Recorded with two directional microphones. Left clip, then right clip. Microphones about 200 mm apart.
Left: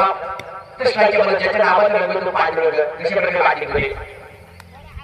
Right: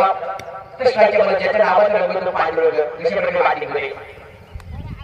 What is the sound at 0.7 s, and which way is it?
A man's voice, 40° left (ahead or behind).